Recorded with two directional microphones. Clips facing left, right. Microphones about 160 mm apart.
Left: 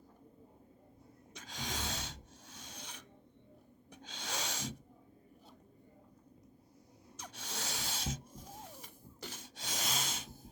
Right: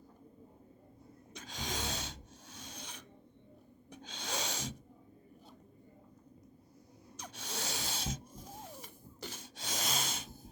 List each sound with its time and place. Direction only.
1.3 s snort: 20° right (ahead or behind)
2.6 s filing: 20° right (ahead or behind)
4.0 s snort: 20° right (ahead or behind)
7.2 s a sound: 15° right (ahead or behind)
7.9 s hiss: 25° right (ahead or behind)
8.8 s a sound: 30° right (ahead or behind)